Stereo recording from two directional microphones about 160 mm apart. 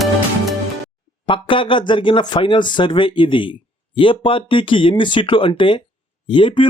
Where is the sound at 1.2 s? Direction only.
30° left (ahead or behind).